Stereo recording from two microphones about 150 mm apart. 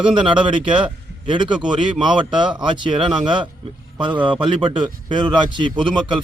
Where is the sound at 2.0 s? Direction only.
30° right (ahead or behind).